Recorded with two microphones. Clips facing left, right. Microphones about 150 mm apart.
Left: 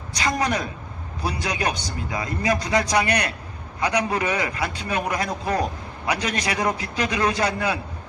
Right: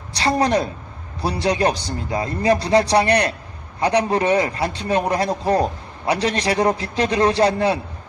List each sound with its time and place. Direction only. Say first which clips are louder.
0.1 s a woman's voice: right 6 dB; 35° right (ahead or behind)